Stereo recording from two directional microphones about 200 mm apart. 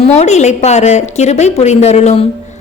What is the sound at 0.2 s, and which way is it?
A woman's voice, 35° left (ahead or behind).